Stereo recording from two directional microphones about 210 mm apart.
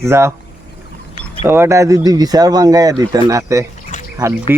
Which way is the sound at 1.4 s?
10° right (ahead or behind).